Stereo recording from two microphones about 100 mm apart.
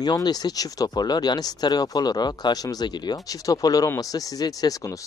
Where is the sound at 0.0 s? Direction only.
40° left (ahead or behind).